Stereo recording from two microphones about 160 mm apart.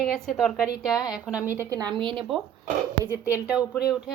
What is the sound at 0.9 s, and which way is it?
Speech, 25° left (ahead or behind).